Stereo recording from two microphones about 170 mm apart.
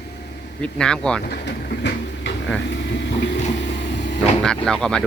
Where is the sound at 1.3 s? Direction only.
80° left.